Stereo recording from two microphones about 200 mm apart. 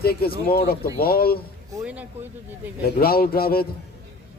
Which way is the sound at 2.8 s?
50° left (ahead or behind).